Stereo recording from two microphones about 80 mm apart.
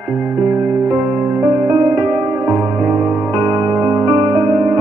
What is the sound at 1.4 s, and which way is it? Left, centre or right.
Music, right.